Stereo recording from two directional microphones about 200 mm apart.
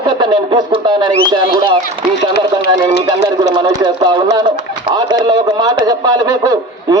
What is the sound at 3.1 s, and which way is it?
A man's voice, 20° right (ahead or behind).